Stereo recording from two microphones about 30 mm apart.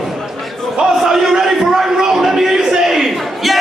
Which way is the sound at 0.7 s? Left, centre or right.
Centre.